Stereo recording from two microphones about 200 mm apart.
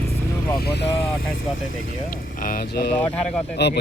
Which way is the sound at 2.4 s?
45° left (ahead or behind).